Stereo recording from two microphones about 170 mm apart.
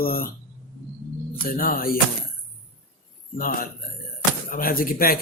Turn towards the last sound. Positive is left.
turn(degrees=60)  # may be behind; listen again after turning